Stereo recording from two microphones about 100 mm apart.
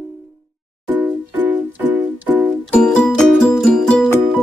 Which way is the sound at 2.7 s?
5° left (ahead or behind).